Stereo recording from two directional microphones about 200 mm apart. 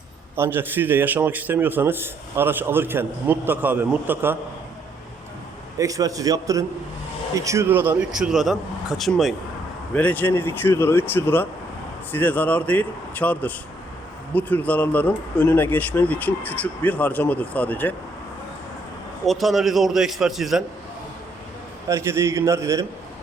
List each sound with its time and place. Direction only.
0.3 s a man's voice: 10° right (ahead or behind)
5.7 s a man's voice: 15° right (ahead or behind); by 17.9 s 10° left (ahead or behind)
19.2 s speech: centre (ahead or behind)
21.8 s a man's voice: 15° right (ahead or behind)